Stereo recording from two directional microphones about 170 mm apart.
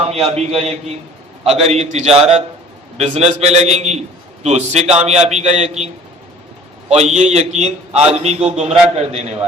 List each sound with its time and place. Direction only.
0.1 s a man's voice: 35° right (ahead or behind)